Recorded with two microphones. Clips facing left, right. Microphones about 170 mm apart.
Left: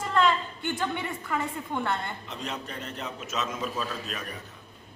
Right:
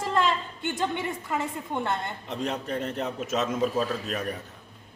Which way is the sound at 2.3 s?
55° right (ahead or behind).